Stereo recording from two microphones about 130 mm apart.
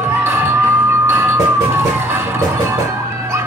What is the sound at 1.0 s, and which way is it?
Music, 20° right (ahead or behind).